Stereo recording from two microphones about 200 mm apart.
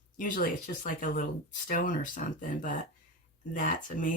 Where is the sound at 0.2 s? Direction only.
40° left (ahead or behind).